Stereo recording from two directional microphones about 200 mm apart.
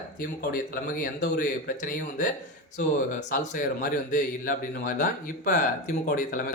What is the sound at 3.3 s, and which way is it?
A man's voice, 40° left (ahead or behind).